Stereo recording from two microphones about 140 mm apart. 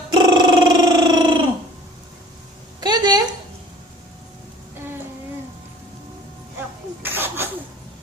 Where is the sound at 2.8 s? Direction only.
30° right (ahead or behind).